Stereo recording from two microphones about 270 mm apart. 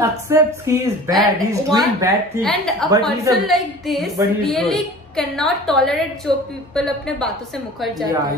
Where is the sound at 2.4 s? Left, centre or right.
Centre.